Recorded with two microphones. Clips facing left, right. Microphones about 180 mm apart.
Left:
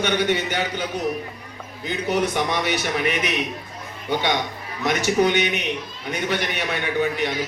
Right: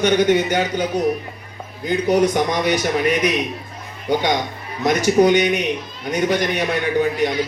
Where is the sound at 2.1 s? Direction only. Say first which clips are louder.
Right 5 dB; 40° right (ahead or behind).